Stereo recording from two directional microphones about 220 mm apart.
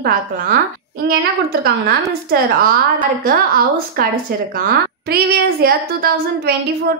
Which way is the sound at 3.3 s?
40° right (ahead or behind).